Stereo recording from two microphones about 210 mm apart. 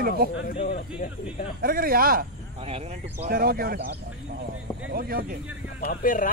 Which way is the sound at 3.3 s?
45° right (ahead or behind).